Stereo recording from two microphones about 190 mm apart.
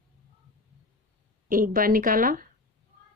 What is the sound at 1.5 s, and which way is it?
Speech, 45° right (ahead or behind).